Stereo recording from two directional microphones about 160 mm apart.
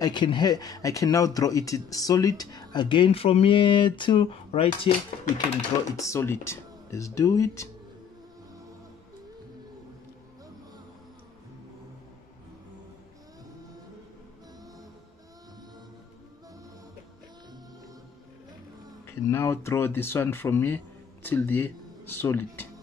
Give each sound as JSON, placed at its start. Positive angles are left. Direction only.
{"t": 0.0, "sound": "speech", "side_deg": 30}
{"t": 5.9, "sound": "speech", "side_deg": 15}
{"t": 19.0, "sound": "speech", "side_deg": 15}